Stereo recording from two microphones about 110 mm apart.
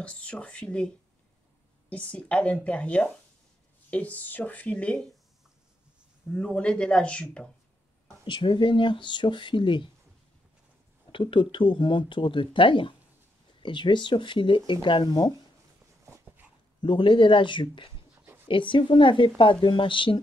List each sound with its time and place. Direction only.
0.0 s a woman's voice: 10° left (ahead or behind)
6.3 s a woman's voice: 10° left (ahead or behind)
8.3 s speech: 45° left (ahead or behind)
11.1 s speech: 50° left (ahead or behind)
16.8 s speech: 50° left (ahead or behind)
18.2 s a sound: 15° right (ahead or behind)
18.5 s speech: 50° left (ahead or behind)